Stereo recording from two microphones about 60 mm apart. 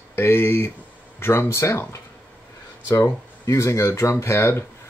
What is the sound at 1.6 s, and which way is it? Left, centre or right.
Speech, left.